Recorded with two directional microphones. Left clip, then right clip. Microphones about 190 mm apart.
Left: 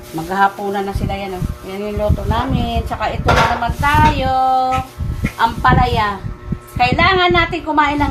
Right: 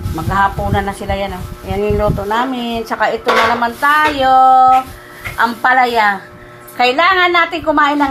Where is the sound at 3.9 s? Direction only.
30° right (ahead or behind).